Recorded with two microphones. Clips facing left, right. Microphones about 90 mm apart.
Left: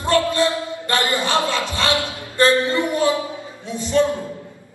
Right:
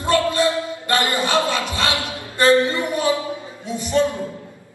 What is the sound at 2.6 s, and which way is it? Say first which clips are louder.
Speech: left 1 dB; 20° left (ahead or behind).